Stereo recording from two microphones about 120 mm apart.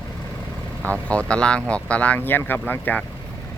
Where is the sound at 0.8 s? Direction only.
10° left (ahead or behind).